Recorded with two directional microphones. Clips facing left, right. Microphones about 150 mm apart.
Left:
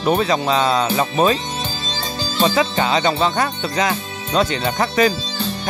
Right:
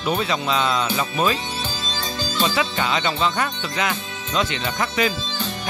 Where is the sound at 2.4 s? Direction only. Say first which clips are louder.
Left 5 dB; 35° left (ahead or behind).